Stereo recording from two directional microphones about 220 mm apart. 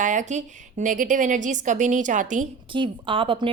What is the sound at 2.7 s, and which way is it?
Speech, 25° right (ahead or behind).